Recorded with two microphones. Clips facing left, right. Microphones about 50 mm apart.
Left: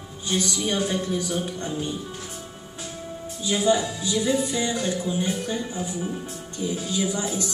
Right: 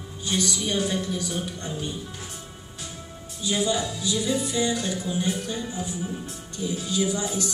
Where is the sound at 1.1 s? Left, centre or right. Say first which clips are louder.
Left 3 dB; centre.